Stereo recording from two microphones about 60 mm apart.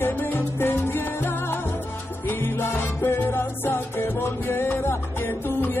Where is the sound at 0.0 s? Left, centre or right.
Left.